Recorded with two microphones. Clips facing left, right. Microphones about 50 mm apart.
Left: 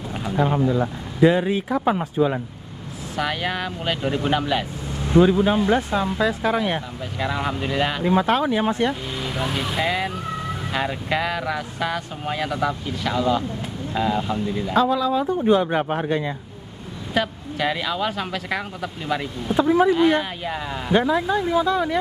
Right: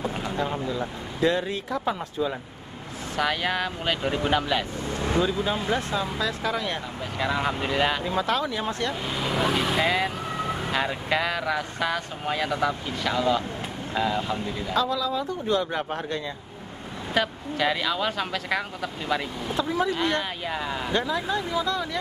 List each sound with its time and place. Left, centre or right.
0.4 s speech: centre
3.2 s speech: centre
5.2 s speech: left
7.2 s speech: centre
8.0 s speech: left
9.8 s speech: centre
14.7 s speech: left
17.1 s speech: centre
19.5 s speech: left
20.0 s speech: centre
20.9 s speech: left